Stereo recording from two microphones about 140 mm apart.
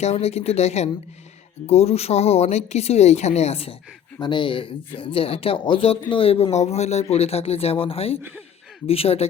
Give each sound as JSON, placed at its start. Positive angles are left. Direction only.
{"t": 0.0, "sound": "speech", "side_deg": 50}
{"t": 4.2, "sound": "speech", "side_deg": 35}